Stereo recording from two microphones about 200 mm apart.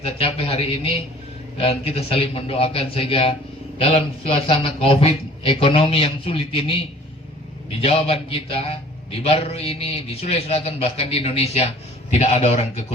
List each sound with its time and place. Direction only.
0.0 s a man's voice: 30° left (ahead or behind)
7.8 s a man's voice: 30° left (ahead or behind)